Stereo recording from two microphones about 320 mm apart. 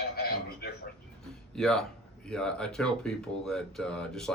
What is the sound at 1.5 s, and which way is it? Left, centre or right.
Speech, centre.